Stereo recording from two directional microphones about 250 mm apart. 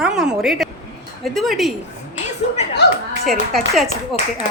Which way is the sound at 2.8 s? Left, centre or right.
Left.